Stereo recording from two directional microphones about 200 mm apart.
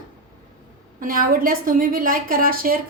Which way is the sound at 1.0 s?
45° right (ahead or behind).